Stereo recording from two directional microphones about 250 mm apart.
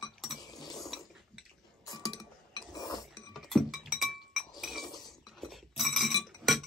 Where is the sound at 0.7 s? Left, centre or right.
Centre.